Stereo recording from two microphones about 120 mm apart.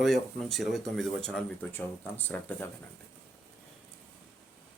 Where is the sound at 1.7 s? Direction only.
15° left (ahead or behind).